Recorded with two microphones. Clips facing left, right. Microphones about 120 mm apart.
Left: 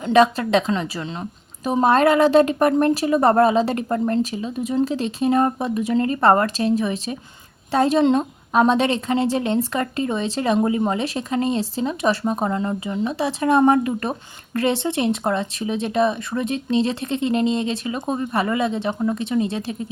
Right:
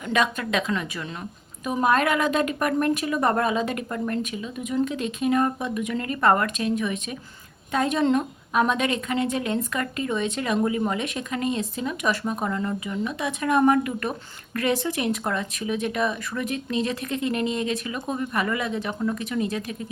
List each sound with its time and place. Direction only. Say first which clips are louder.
0.0 s a woman's voice: left 8 dB; 30° left (ahead or behind)